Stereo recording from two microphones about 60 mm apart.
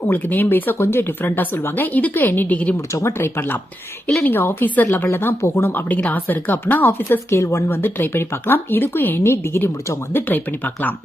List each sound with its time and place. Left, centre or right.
0.1 s speech: left
2.7 s speech: left
5.0 s speech: left
5.7 s speech: left
6.8 s speech: left